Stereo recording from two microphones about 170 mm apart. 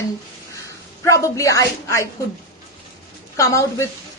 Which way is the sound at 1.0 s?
20° left (ahead or behind).